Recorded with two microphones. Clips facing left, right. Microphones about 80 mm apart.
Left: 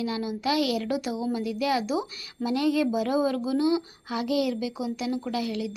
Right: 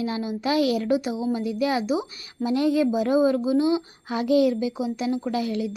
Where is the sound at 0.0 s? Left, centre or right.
Right.